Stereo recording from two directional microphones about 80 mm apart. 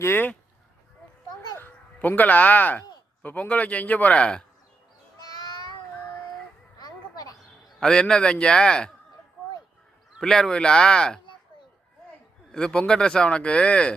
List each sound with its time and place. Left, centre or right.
0.0 s a man's voice: left
1.5 s a man's voice: left
6.7 s a sound: left
7.8 s speech: centre
10.2 s speech: centre
12.5 s speech: centre